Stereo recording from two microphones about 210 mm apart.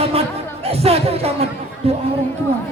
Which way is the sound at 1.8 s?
30° right (ahead or behind).